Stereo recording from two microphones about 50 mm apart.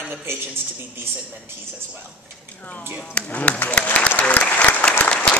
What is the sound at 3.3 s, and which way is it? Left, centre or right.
Speech, left.